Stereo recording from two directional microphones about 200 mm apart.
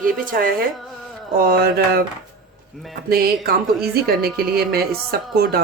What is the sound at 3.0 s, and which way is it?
Speech, 50° right (ahead or behind).